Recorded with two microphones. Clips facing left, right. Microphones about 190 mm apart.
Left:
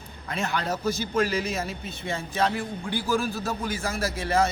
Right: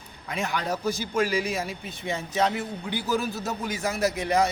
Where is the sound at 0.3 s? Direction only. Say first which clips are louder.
Even; 15° right (ahead or behind).